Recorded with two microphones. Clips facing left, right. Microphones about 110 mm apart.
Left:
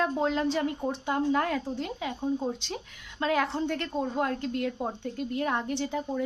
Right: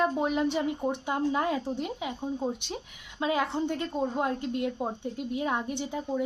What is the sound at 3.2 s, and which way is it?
A woman's voice, 15° right (ahead or behind).